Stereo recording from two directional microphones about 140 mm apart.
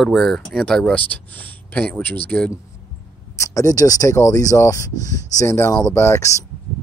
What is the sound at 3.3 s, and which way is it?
Speech, 25° left (ahead or behind).